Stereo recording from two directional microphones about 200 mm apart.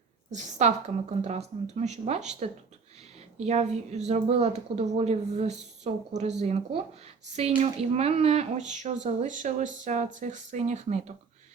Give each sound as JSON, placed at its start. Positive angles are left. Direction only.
{"t": 0.3, "sound": "a woman's voice", "side_deg": -35}